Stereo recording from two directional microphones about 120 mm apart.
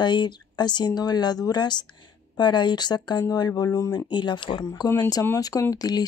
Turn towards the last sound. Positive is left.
turn(degrees=35)  # may be behind; listen again after turning